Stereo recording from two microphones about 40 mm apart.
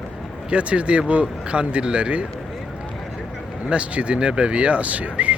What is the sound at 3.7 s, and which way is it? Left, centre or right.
Speech, right.